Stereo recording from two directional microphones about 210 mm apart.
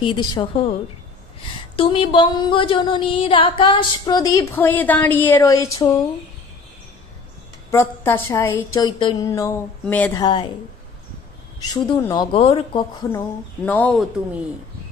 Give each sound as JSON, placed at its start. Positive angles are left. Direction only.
{"t": 0.0, "sound": "speech", "side_deg": 20}
{"t": 1.8, "sound": "speech", "side_deg": 25}
{"t": 7.7, "sound": "a woman's voice", "side_deg": 10}
{"t": 10.2, "sound": "speech", "side_deg": 20}
{"t": 11.6, "sound": "speech", "side_deg": 20}
{"t": 13.7, "sound": "a woman's voice", "side_deg": 5}